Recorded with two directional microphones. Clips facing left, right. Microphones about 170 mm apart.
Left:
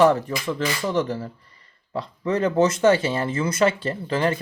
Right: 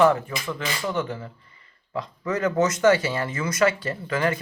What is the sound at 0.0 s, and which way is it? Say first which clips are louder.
Speech: left 2 dB; 35° left (ahead or behind).